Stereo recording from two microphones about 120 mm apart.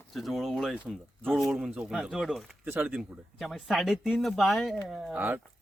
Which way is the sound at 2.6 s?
15° right (ahead or behind).